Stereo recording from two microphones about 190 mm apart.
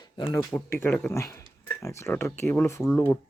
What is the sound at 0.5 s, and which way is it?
Speech, 10° left (ahead or behind).